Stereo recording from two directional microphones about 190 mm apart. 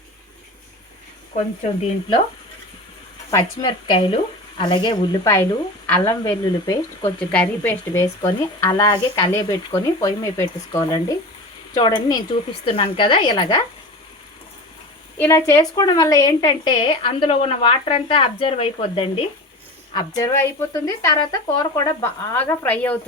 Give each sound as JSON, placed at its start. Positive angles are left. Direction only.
{"t": 1.3, "sound": "speech", "side_deg": 35}
{"t": 3.3, "sound": "a woman's voice", "side_deg": 25}
{"t": 7.3, "sound": "a woman's voice", "side_deg": 10}
{"t": 15.2, "sound": "a woman's voice", "side_deg": 15}